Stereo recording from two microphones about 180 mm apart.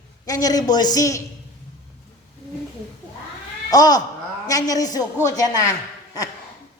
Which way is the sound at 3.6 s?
20° left (ahead or behind).